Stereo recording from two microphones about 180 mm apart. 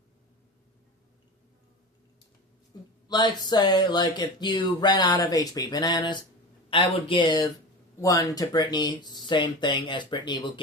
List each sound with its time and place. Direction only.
2.7 s speech: 25° left (ahead or behind)